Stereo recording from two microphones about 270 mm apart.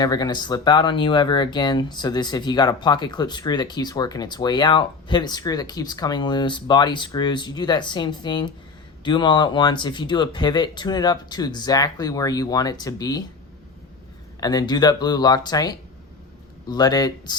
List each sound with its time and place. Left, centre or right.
0.0 s speech: centre
14.4 s speech: centre